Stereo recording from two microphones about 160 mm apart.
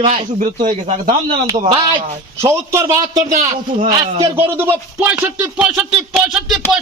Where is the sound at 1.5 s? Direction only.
30° right (ahead or behind).